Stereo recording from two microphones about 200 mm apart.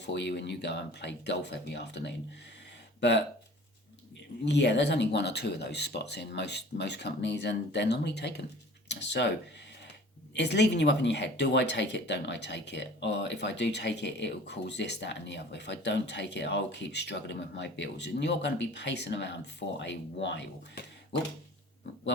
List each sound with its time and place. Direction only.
0.0 s speech: 60° left (ahead or behind)
4.4 s speech: 60° left (ahead or behind)
10.3 s speech: 60° left (ahead or behind)